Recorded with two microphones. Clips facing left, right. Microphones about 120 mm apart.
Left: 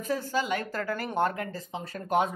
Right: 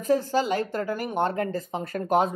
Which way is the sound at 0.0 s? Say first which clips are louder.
Right 6 dB; 40° right (ahead or behind).